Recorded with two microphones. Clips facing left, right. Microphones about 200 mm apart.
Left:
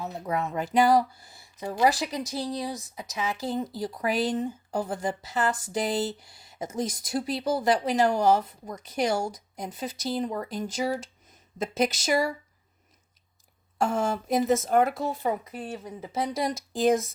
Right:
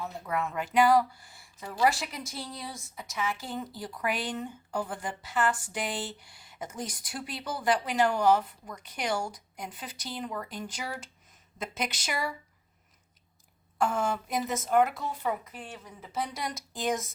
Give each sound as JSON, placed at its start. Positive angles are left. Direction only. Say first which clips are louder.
{"t": 0.0, "sound": "music", "louder": "left 4 dB", "side_deg": 20}
{"t": 0.3, "sound": "speech", "louder": "left 2 dB", "side_deg": 35}
{"t": 3.0, "sound": "a woman's voice", "louder": "left 1 dB", "side_deg": 20}
{"t": 3.3, "sound": "speech", "louder": "left 7 dB", "side_deg": 35}
{"t": 13.8, "sound": "speech", "louder": "left 3 dB", "side_deg": 40}